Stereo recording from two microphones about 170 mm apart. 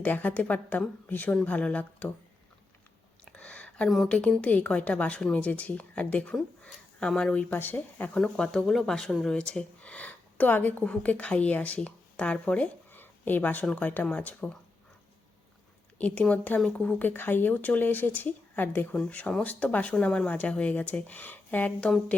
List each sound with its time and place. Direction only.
0.0 s speech: 10° left (ahead or behind)
3.2 s speech: 5° left (ahead or behind)
16.0 s speech: 10° left (ahead or behind)